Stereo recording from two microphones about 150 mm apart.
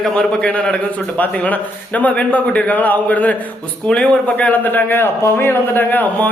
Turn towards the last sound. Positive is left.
turn(degrees=10)  # may be behind; listen again after turning